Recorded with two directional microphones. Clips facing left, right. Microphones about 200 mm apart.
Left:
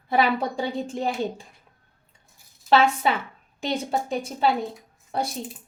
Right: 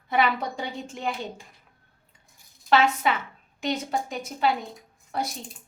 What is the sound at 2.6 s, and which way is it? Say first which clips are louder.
A woman's voice: left 2 dB; 30° left (ahead or behind).